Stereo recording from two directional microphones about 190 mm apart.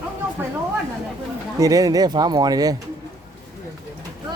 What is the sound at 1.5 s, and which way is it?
Speech, 20° right (ahead or behind).